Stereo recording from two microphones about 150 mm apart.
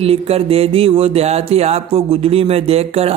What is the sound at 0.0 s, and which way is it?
A man's voice, 40° right (ahead or behind).